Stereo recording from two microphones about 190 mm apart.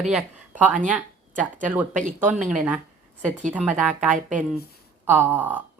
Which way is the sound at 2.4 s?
10° right (ahead or behind).